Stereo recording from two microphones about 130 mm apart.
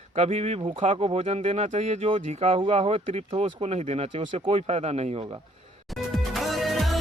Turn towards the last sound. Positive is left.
turn(degrees=0)  # may be behind; listen again after turning